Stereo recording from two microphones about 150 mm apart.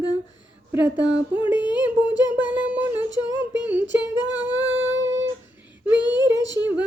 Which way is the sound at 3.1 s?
30° left (ahead or behind).